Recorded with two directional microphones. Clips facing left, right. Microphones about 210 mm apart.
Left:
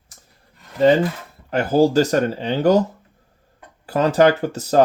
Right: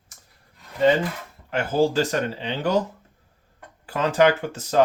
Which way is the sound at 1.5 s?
40° left (ahead or behind).